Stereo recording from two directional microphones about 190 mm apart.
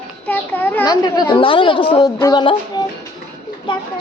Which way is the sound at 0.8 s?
20° left (ahead or behind).